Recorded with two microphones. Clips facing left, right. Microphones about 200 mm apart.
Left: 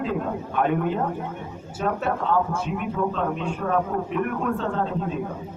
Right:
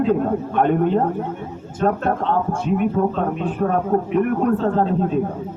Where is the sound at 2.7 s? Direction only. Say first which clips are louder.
Right 7 dB; 45° right (ahead or behind).